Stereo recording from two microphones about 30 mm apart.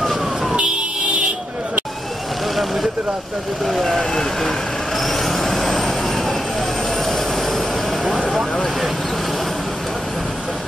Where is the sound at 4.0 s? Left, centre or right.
Left.